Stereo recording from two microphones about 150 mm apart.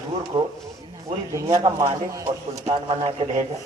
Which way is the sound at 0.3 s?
30° right (ahead or behind).